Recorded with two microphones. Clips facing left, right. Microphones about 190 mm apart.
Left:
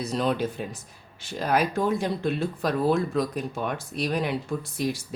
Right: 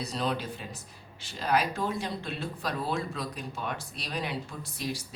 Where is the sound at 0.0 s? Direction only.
50° left (ahead or behind).